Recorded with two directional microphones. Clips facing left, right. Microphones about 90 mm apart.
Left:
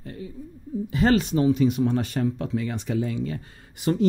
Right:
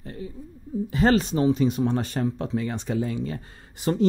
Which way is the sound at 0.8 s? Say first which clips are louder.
Even; 35° right (ahead or behind).